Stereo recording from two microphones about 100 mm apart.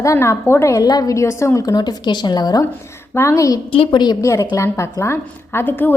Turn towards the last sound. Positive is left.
turn(degrees=20)  # may be behind; listen again after turning